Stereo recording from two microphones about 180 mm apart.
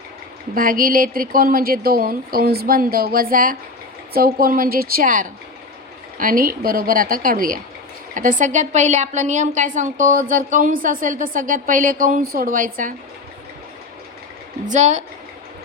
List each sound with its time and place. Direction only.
0.5 s a woman's voice: 50° right (ahead or behind)
14.7 s speech: 40° right (ahead or behind)